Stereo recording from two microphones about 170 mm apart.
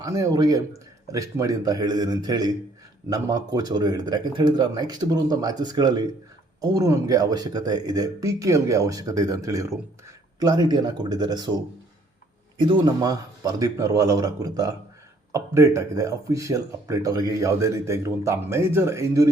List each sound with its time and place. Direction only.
0.0 s speech: 20° right (ahead or behind)